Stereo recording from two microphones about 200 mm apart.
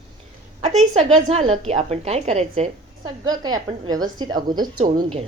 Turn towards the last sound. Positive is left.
turn(degrees=-30)  # may be behind; listen again after turning